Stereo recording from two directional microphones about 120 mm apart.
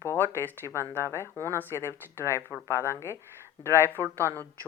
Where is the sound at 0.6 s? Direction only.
30° right (ahead or behind).